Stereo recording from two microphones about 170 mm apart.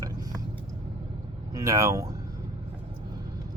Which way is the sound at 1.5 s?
20° right (ahead or behind).